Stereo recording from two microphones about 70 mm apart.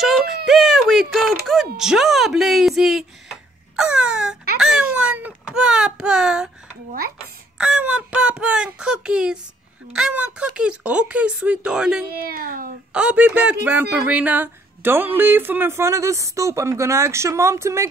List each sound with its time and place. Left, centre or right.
0.0 s speech: centre
7.5 s a man's voice: centre; by 17.8 s right